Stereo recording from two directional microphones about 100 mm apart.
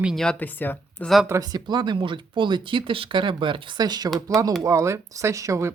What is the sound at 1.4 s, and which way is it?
Speech, 45° right (ahead or behind).